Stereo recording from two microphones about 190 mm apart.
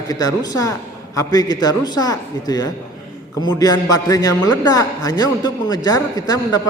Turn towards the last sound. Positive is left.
turn(degrees=20)  # may be behind; listen again after turning